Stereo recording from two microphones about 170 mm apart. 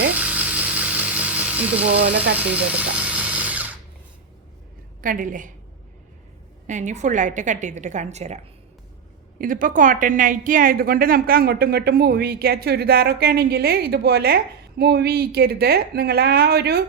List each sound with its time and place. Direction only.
0.2 s a sound: 10° right (ahead or behind)
2.3 s drill: 10° right (ahead or behind)
5.0 s a woman's voice: 50° right (ahead or behind)
6.7 s a woman's voice: 45° right (ahead or behind)
9.4 s a woman's voice: 55° right (ahead or behind); by 16.8 s 70° right (ahead or behind)